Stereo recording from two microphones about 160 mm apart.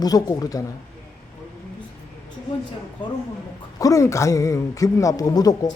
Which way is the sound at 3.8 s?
20° left (ahead or behind).